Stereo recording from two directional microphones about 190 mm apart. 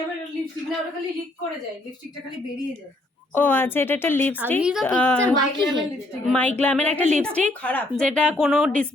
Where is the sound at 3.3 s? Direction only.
10° left (ahead or behind).